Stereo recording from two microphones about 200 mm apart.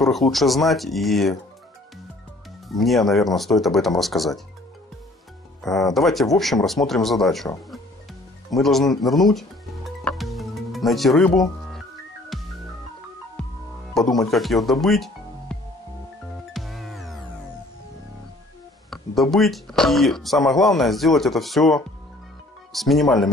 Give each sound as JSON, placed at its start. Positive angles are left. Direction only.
{"t": 0.0, "sound": "speech", "side_deg": 0}
{"t": 2.7, "sound": "speech", "side_deg": 0}
{"t": 5.6, "sound": "speech", "side_deg": 0}
{"t": 8.5, "sound": "speech", "side_deg": 0}
{"t": 9.0, "sound": "music", "side_deg": 0}
{"t": 13.9, "sound": "speech", "side_deg": 0}
{"t": 16.5, "sound": "music", "side_deg": 0}
{"t": 19.3, "sound": "speech", "side_deg": 0}